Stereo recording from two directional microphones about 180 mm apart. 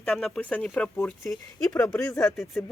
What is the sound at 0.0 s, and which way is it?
Speech, centre (ahead or behind).